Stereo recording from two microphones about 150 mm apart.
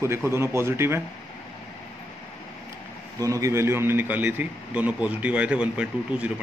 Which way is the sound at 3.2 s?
20° right (ahead or behind).